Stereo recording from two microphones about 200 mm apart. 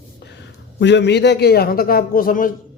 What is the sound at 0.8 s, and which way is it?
A man's voice, 60° left (ahead or behind).